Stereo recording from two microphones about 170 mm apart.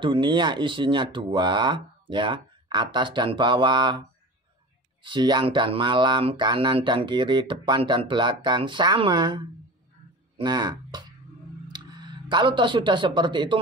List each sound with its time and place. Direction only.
0.0 s speech: 30° right (ahead or behind)
5.0 s speech: 25° right (ahead or behind)